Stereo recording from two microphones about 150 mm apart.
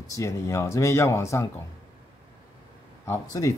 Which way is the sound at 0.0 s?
20° left (ahead or behind).